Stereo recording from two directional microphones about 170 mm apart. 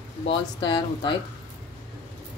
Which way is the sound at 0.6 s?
30° left (ahead or behind).